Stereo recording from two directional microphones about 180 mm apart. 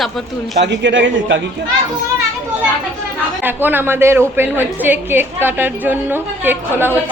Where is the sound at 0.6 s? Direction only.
80° right.